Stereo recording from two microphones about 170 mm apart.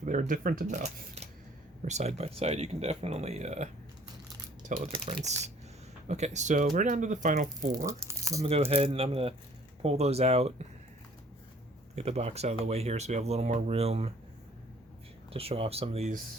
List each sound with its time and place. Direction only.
0.0 s speech: 50° right (ahead or behind)
4.9 s speech: 35° right (ahead or behind)
7.9 s speech: 15° right (ahead or behind)
8.4 s speech: 35° right (ahead or behind)
11.9 s speech: 40° right (ahead or behind)
15.3 s speech: 35° right (ahead or behind)